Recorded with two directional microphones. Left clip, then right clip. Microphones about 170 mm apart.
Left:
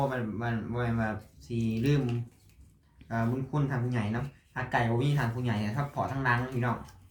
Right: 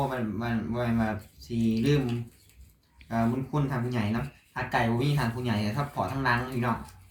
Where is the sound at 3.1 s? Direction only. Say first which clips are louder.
Right 3 dB; 10° left (ahead or behind).